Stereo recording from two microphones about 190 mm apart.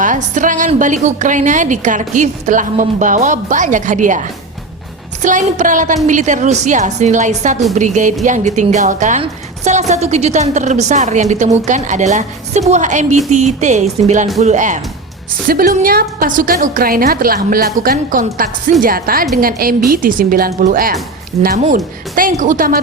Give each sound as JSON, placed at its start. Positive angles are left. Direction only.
{"t": 0.0, "sound": "a woman's voice", "side_deg": -40}